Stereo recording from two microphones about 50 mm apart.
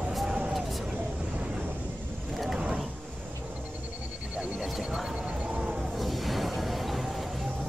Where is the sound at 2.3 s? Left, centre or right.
Centre.